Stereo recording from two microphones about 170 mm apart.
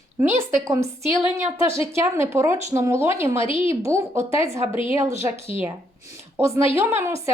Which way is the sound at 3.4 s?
30° left (ahead or behind).